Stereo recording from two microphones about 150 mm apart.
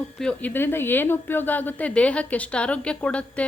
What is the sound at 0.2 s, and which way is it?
Speech, 10° left (ahead or behind).